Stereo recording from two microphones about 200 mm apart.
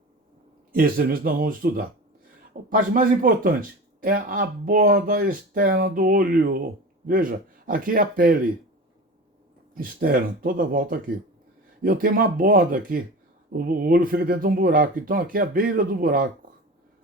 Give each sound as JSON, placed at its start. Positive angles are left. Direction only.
{"t": 0.7, "sound": "speech", "side_deg": -45}
{"t": 9.7, "sound": "speech", "side_deg": -45}